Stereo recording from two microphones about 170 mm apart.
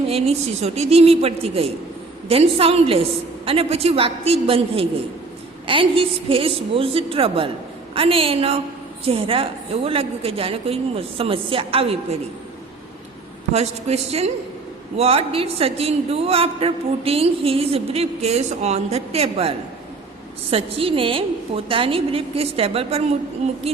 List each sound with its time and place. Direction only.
0.1 s a woman's voice: 40° right (ahead or behind)
13.5 s a woman's voice: 40° right (ahead or behind)